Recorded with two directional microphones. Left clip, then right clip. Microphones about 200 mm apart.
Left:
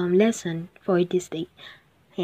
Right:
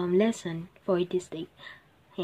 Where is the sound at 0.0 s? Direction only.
15° left (ahead or behind).